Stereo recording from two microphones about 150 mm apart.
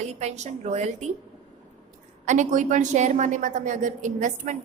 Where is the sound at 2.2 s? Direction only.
55° right (ahead or behind).